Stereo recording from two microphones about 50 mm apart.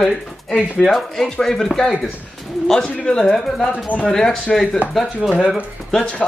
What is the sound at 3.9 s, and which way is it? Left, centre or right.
Speech, left.